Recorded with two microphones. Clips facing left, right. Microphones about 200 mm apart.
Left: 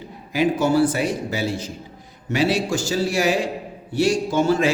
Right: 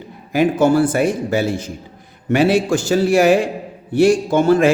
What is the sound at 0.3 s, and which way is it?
A man's voice, 50° right (ahead or behind).